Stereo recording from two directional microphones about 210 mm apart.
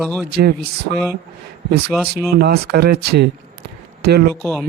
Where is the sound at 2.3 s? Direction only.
50° right (ahead or behind).